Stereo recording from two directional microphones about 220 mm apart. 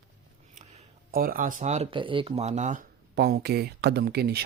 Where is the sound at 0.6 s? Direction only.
40° right (ahead or behind).